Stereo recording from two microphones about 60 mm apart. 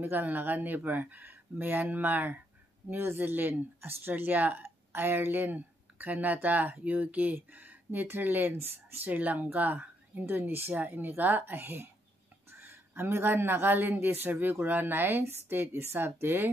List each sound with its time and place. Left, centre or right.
0.0 s speech: right